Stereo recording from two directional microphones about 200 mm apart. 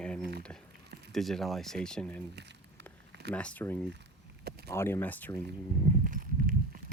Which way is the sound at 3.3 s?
5° left (ahead or behind).